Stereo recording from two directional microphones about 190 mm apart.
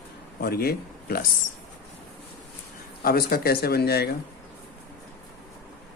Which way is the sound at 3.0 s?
50° left (ahead or behind).